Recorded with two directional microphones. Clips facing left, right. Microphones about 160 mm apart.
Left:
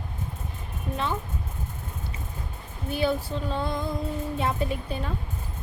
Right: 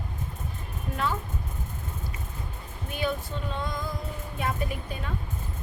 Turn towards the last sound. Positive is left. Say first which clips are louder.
# left 4 dB
turn(degrees=30)  # may be behind; listen again after turning